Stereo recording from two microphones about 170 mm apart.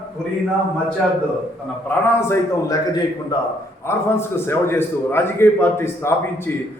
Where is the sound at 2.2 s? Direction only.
15° left (ahead or behind).